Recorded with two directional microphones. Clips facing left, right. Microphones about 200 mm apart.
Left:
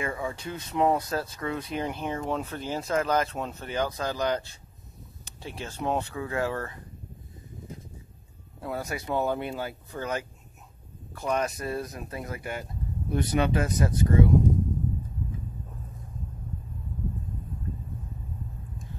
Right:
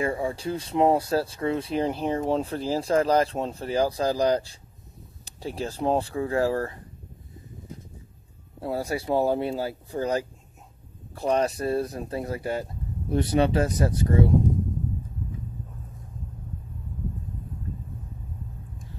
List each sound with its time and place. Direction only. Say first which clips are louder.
0.0 s speech: right 5 dB; 30° right (ahead or behind)
8.5 s speech: right 5 dB; 30° right (ahead or behind)